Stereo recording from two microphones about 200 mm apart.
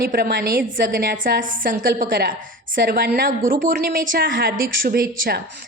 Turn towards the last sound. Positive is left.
turn(degrees=-50)  # may be behind; listen again after turning